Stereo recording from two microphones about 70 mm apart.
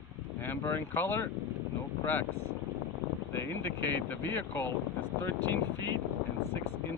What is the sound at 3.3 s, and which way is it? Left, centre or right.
Speech, left.